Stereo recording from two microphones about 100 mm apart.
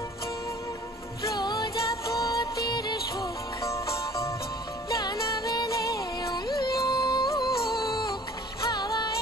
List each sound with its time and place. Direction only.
1.2 s music: 45° left (ahead or behind)
3.6 s music: 30° left (ahead or behind)
5.7 s music: 35° left (ahead or behind)
8.7 s music: 40° left (ahead or behind)